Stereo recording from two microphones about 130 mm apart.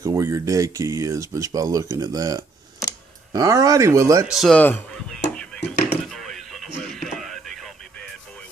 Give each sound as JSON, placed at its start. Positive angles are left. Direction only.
{"t": 0.0, "sound": "speech", "side_deg": -25}
{"t": 4.3, "sound": "speech", "side_deg": 0}
{"t": 4.6, "sound": "a sound", "side_deg": 10}